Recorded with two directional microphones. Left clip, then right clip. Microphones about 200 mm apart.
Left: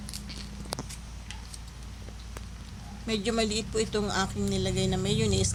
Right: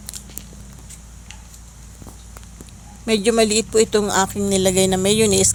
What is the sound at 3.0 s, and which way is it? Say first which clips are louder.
Speech: right 12 dB; 40° right (ahead or behind).